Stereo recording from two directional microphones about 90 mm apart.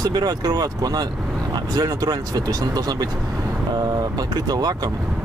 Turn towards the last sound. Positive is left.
turn(degrees=-50)  # may be behind; listen again after turning